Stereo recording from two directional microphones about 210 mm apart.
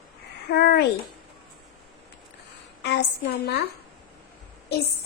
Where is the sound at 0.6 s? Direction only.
50° left (ahead or behind).